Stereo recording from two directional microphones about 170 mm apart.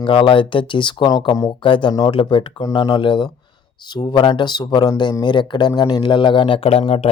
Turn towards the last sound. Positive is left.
turn(degrees=35)  # may be behind; listen again after turning